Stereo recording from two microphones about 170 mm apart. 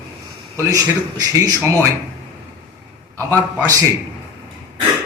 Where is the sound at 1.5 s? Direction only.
15° right (ahead or behind).